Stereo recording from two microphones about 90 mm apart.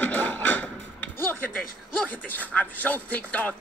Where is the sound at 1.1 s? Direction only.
20° left (ahead or behind).